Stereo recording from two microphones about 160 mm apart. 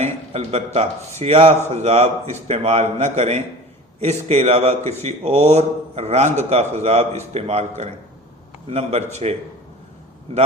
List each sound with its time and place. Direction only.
0.0 s a man's voice: 40° right (ahead or behind)